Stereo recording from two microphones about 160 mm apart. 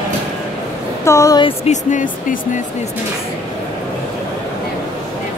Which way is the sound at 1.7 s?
50° left (ahead or behind).